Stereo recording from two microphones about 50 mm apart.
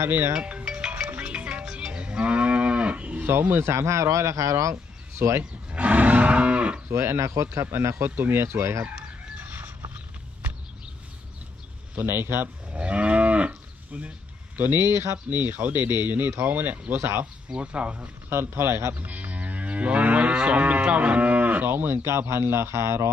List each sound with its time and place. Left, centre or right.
0.3 s music: right
1.6 s moo: centre
3.5 s speech: right
5.4 s moo: right
6.9 s speech: right
7.5 s speech: right
12.0 s speech: right
12.7 s moo: right
13.9 s speech: right
14.5 s speech: right
17.5 s speech: right
18.3 s speech: right
18.9 s moo: right
22.3 s speech: right